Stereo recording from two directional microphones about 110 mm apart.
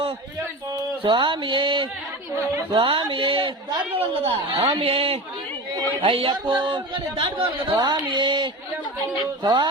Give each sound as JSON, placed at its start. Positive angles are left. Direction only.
{"t": 1.0, "sound": "speech", "side_deg": -50}
{"t": 3.9, "sound": "a man's voice", "side_deg": -60}
{"t": 9.4, "sound": "music", "side_deg": -40}